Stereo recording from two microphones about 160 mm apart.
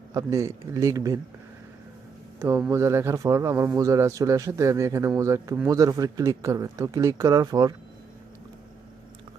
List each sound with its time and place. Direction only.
0.1 s speech: 20° right (ahead or behind)
2.4 s speech: 15° right (ahead or behind)